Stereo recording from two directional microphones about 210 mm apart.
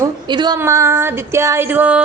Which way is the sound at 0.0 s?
20° right (ahead or behind).